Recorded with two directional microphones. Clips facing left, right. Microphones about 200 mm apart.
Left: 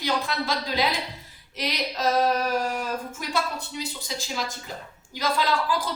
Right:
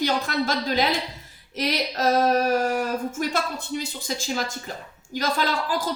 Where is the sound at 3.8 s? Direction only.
50° right (ahead or behind).